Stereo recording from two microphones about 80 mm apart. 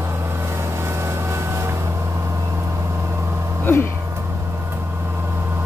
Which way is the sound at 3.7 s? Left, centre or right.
Left.